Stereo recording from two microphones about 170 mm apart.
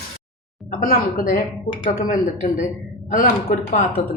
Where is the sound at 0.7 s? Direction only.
55° left (ahead or behind).